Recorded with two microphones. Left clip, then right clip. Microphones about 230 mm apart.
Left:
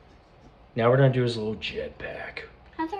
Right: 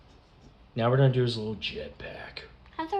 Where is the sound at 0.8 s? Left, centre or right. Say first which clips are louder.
Left 4 dB; centre.